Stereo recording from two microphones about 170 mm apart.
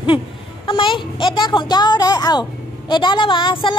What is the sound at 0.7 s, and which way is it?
A woman's voice, 30° left (ahead or behind).